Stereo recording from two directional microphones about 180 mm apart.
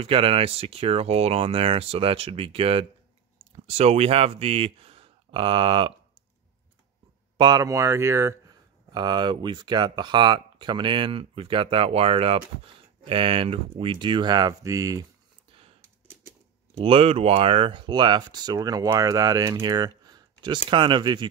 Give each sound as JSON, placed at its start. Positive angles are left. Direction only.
{"t": 0.0, "sound": "speech", "side_deg": -30}
{"t": 7.3, "sound": "speech", "side_deg": -25}
{"t": 16.7, "sound": "speech", "side_deg": -30}